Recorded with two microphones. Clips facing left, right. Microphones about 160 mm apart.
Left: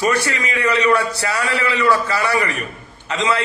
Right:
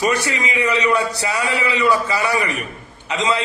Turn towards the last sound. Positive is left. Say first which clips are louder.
# even
turn(degrees=-20)  # may be behind; listen again after turning